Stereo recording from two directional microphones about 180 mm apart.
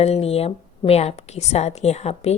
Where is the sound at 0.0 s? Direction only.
35° left (ahead or behind).